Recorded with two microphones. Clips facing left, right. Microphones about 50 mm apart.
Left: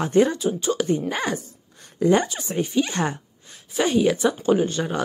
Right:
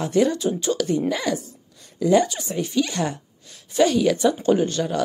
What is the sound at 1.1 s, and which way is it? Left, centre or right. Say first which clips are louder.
A woman's voice: right 1 dB; left.